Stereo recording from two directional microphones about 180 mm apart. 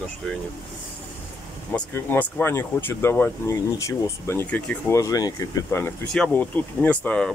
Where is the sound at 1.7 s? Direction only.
10° left (ahead or behind).